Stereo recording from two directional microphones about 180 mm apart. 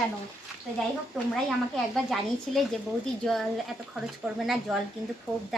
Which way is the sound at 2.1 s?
Centre (ahead or behind).